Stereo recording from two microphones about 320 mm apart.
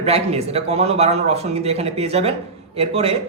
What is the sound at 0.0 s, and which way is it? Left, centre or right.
A man's voice, centre.